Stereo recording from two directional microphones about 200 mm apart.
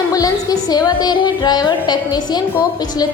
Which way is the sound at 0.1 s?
20° left (ahead or behind).